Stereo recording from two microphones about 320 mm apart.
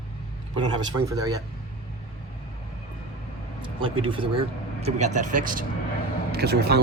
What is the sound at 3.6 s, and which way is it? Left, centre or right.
Speech, centre.